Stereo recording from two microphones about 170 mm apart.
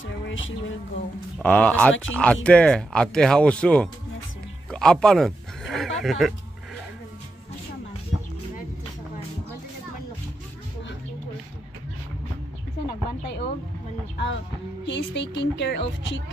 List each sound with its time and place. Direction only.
1.4 s speech: 10° left (ahead or behind)
12.8 s a sound: 85° left
14.1 s music: 90° left
14.9 s speech: 90° left